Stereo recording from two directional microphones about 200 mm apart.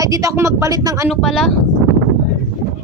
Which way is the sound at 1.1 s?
Centre (ahead or behind).